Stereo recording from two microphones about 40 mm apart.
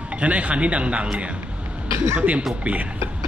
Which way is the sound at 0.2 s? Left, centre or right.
Right.